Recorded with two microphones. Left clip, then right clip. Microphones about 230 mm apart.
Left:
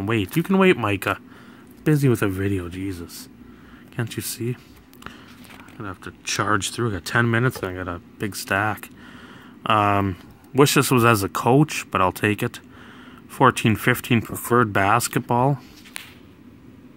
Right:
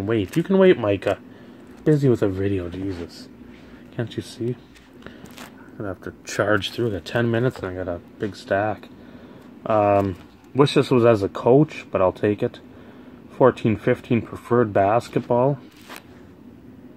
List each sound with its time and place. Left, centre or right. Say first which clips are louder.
0.0 s speech: right 1 dB; left
2.0 s speech: right 2 dB; left
4.0 s speech: even; left
5.8 s speech: right 4 dB; centre
6.2 s speech: right 1 dB; left